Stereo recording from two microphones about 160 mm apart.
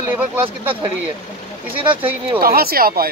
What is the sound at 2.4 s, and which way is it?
Speech, 70° right (ahead or behind).